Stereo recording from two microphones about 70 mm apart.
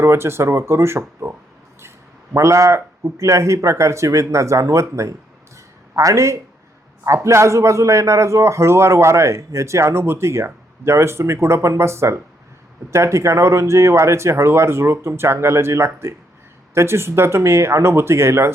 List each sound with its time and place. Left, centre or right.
0.0 s speech: right
2.3 s a man's voice: right